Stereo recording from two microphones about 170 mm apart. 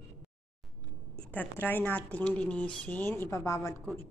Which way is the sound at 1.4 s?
10° left (ahead or behind).